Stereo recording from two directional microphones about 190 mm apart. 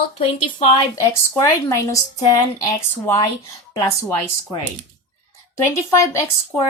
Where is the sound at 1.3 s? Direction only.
15° left (ahead or behind).